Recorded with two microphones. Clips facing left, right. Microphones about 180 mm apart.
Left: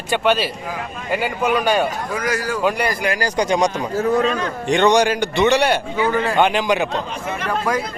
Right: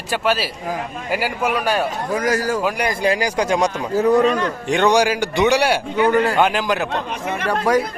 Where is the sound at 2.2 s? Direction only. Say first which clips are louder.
Right 4 dB; 40° right (ahead or behind).